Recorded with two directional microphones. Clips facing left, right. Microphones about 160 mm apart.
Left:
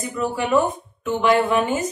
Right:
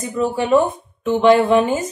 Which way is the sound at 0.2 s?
30° right (ahead or behind).